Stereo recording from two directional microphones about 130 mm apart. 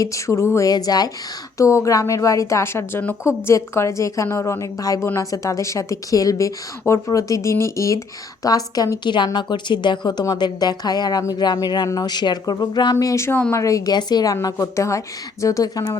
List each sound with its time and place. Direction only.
0.0 s a woman's voice: 25° left (ahead or behind)